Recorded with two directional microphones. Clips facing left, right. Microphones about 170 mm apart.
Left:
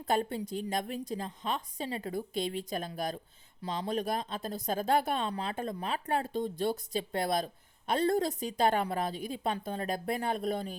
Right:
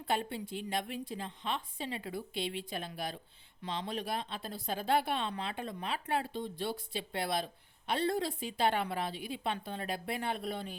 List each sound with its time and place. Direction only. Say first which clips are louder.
0.0 s a woman's voice: left 4 dB; 40° left (ahead or behind)